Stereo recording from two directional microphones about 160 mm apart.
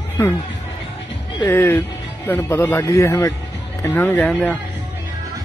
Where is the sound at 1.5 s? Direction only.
15° left (ahead or behind).